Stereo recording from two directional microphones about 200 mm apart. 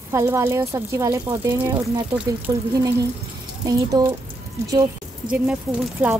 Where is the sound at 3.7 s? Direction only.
20° right (ahead or behind).